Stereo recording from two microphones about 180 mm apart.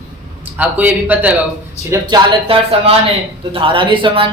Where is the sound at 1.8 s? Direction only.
25° right (ahead or behind).